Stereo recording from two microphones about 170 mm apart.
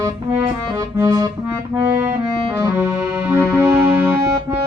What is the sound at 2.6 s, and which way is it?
Accordion, 15° right (ahead or behind).